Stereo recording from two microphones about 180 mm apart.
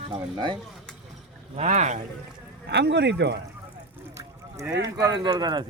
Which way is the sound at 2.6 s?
70° right (ahead or behind).